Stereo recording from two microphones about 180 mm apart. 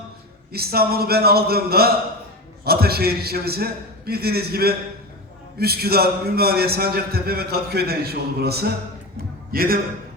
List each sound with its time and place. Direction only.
0.5 s a man's voice: 60° right (ahead or behind)